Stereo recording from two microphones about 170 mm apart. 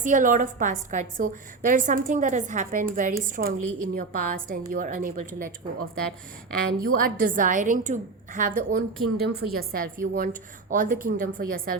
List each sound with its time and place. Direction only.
0.0 s a woman's voice: 50° right (ahead or behind)
6.8 s a woman's voice: 55° right (ahead or behind)